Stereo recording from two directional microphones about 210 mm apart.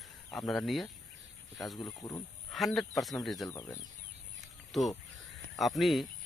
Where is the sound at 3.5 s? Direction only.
15° left (ahead or behind).